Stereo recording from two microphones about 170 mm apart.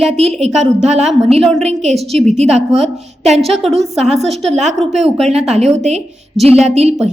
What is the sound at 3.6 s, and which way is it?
Speech, centre (ahead or behind).